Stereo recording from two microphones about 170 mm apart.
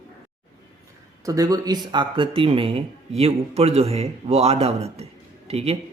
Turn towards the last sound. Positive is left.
turn(degrees=-35)  # may be behind; listen again after turning